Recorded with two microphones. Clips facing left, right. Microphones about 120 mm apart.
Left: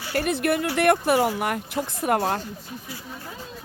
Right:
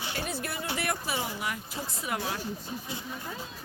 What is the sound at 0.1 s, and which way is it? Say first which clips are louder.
Speech: left 14 dB; 65° left (ahead or behind).